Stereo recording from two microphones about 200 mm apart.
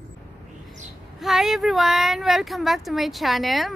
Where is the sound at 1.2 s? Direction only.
Centre (ahead or behind).